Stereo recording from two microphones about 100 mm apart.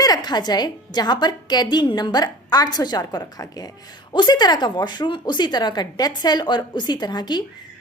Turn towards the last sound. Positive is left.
turn(degrees=45)  # may be behind; listen again after turning